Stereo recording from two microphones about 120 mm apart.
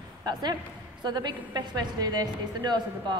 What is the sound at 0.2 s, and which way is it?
A man's voice, 35° right (ahead or behind).